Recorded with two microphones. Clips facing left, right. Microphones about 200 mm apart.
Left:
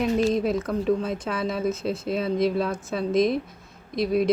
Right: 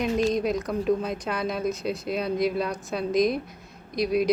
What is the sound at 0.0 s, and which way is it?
Speech, 5° left (ahead or behind).